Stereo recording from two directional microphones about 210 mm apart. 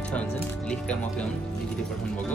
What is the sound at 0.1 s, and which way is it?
Speech, 5° left (ahead or behind).